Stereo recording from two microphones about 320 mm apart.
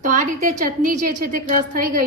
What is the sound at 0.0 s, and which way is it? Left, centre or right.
A woman's voice, right.